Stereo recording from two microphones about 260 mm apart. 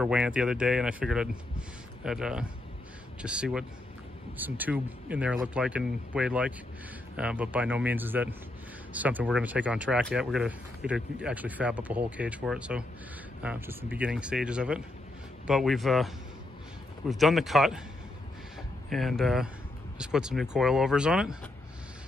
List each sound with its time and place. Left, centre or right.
0.0 s speech: centre
17.1 s speech: centre
18.9 s speech: centre